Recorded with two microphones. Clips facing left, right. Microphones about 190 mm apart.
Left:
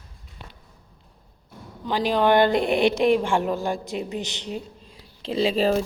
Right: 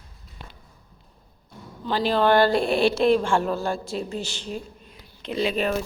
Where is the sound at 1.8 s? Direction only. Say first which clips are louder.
Even; 15° left (ahead or behind).